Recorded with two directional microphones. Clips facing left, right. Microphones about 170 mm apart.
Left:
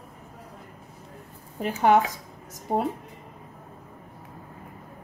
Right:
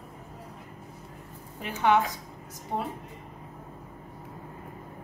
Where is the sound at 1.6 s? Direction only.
40° left (ahead or behind).